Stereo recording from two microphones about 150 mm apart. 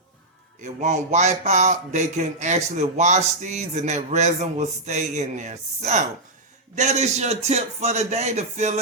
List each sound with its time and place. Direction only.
0.6 s speech: 50° right (ahead or behind)